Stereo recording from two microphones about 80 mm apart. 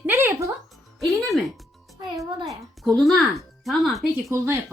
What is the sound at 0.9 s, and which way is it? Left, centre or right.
Music, centre.